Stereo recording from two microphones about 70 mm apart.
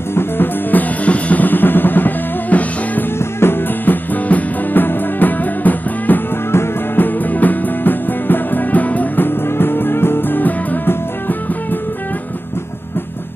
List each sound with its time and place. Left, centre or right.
0.1 s drum: left